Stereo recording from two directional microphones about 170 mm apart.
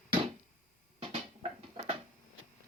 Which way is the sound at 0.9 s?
35° right (ahead or behind).